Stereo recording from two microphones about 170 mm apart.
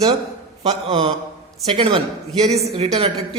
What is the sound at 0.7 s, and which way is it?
A woman's voice, 35° right (ahead or behind).